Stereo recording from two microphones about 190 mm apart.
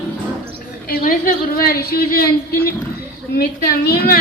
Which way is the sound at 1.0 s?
50° left (ahead or behind).